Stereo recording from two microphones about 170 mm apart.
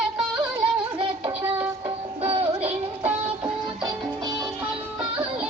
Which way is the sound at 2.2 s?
30° right (ahead or behind).